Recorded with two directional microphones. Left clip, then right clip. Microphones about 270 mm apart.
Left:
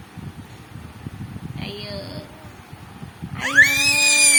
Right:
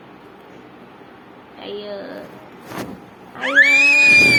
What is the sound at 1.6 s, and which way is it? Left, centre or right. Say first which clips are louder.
Speech: right 4 dB; left.